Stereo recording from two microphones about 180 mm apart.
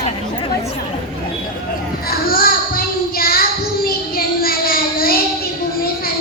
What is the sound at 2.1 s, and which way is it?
Child singing, 55° left (ahead or behind).